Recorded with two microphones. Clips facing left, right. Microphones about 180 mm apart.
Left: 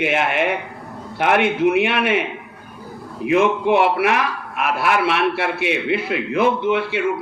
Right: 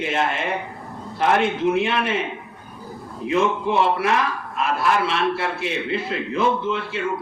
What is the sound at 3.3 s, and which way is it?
A man's voice, 65° left (ahead or behind).